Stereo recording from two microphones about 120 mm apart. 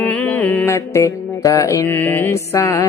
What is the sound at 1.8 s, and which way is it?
Mantra, 15° left (ahead or behind).